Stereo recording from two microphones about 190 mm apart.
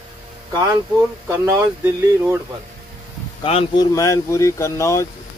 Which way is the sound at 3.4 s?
30° left (ahead or behind).